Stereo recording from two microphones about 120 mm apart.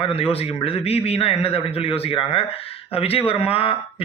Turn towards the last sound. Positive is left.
turn(degrees=50)  # may be behind; listen again after turning